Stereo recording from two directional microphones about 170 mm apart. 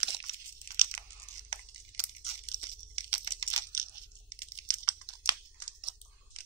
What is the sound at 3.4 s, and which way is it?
Crunch, 20° right (ahead or behind).